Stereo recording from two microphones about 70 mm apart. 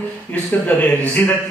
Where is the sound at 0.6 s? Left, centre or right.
Left.